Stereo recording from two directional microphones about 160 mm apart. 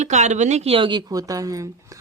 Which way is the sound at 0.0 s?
45° right (ahead or behind).